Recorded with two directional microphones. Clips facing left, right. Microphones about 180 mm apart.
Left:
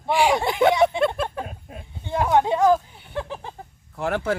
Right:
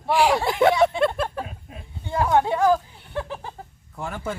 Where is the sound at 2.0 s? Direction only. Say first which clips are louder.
Left 1 dB; 20° left (ahead or behind).